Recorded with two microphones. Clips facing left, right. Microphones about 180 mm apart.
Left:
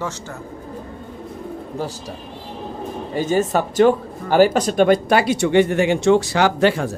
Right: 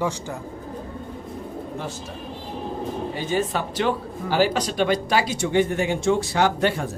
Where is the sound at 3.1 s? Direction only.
45° left (ahead or behind); by 6.9 s 90° left.